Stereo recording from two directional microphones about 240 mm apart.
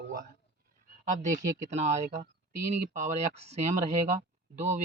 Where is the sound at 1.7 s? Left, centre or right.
Right.